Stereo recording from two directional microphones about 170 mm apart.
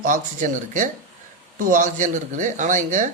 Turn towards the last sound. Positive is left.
turn(degrees=-50)  # may be behind; listen again after turning